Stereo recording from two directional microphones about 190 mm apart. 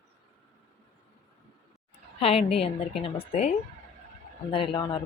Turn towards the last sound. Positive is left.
turn(degrees=25)  # may be behind; listen again after turning